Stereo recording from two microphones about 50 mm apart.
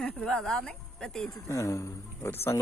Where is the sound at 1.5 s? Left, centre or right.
Left.